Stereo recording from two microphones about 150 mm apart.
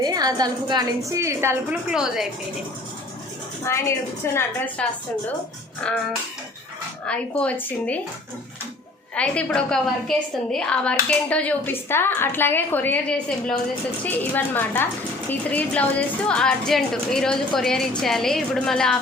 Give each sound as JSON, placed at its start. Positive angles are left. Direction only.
{"t": 0.0, "sound": "a woman's voice", "side_deg": -25}
{"t": 1.9, "sound": "speech", "side_deg": -5}
{"t": 3.6, "sound": "a woman's voice", "side_deg": 20}
{"t": 7.1, "sound": "a woman's voice", "side_deg": 10}
{"t": 9.1, "sound": "a woman's voice", "side_deg": 5}